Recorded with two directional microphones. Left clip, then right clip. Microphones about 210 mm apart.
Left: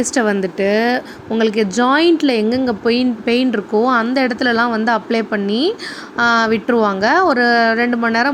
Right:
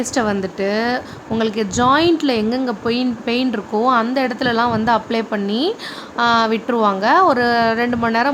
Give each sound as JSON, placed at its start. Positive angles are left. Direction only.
{"t": 0.0, "sound": "speech", "side_deg": 15}